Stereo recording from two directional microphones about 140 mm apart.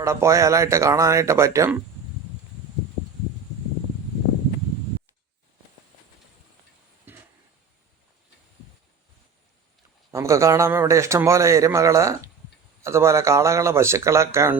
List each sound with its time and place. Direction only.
0.0 s a man's voice: 20° right (ahead or behind)
7.1 s a sound: 15° right (ahead or behind)
10.1 s a man's voice: 20° right (ahead or behind)